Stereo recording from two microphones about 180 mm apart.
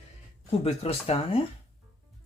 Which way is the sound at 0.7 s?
35° left (ahead or behind).